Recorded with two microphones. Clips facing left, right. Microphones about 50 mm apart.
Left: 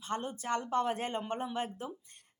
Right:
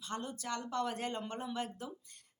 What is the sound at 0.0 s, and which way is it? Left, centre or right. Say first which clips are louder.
A woman's voice: left 4 dB; left.